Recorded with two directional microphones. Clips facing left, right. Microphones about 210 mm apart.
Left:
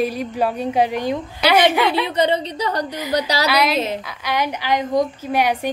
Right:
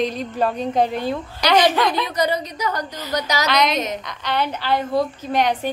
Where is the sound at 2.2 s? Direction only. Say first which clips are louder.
Left 3 dB; 30° left (ahead or behind).